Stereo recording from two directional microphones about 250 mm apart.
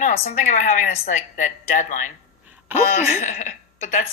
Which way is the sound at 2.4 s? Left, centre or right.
Centre.